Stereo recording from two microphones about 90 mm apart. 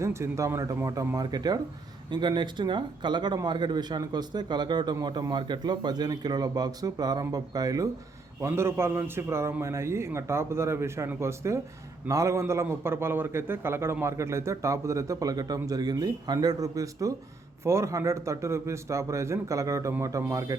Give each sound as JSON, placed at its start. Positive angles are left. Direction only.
{"t": 0.0, "sound": "a man's voice", "side_deg": -30}
{"t": 8.4, "sound": "a man's voice", "side_deg": -30}